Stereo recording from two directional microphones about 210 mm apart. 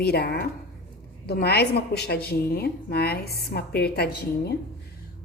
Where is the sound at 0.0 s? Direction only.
50° left (ahead or behind).